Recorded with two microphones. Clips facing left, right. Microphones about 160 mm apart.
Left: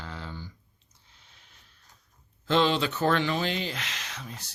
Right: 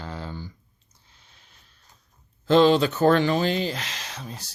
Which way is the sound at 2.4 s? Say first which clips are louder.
Right 7 dB; 40° right (ahead or behind).